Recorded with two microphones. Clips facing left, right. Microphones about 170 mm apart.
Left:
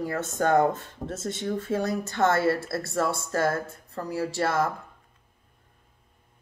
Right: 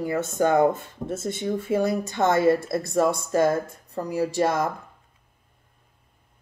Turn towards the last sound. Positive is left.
turn(degrees=-15)  # may be behind; listen again after turning